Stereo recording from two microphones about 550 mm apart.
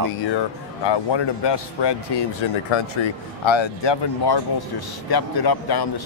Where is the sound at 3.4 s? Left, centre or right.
Left.